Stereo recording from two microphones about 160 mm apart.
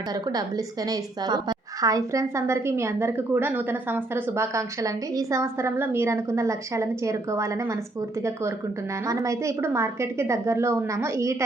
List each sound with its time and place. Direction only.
0.1 s a woman's voice: 25° right (ahead or behind)
9.0 s a woman's voice: 20° right (ahead or behind)